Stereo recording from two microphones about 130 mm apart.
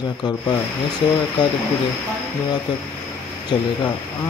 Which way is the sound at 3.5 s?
35° left (ahead or behind).